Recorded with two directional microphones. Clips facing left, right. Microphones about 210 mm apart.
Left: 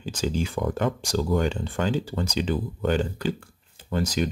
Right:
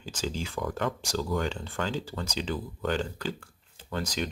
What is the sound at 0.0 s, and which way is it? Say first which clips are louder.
Speech: left 7 dB; 15° left (ahead or behind).